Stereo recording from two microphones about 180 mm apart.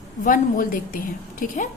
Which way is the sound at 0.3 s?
50° left (ahead or behind).